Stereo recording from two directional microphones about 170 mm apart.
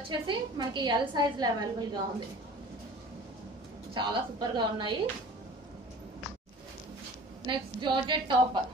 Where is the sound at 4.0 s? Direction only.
25° right (ahead or behind).